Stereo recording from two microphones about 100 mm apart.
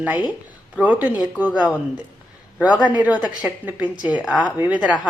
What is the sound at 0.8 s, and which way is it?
Speech, 15° right (ahead or behind).